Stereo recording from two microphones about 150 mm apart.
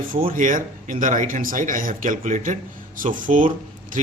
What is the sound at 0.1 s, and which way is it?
Speech, 70° right (ahead or behind).